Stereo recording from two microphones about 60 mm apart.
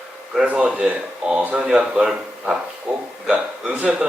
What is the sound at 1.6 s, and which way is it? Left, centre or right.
Speech, centre.